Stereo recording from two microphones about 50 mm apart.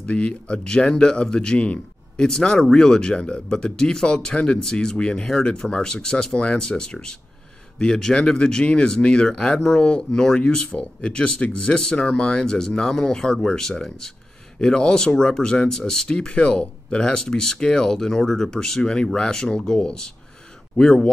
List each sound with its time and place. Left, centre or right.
0.0 s speech: left